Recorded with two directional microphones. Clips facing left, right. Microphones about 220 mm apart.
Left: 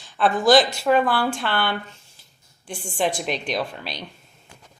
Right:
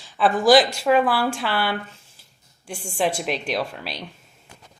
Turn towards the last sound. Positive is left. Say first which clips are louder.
# even
turn(degrees=-5)  # may be behind; listen again after turning